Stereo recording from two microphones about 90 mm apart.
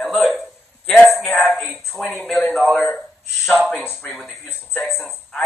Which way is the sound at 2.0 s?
15° left (ahead or behind).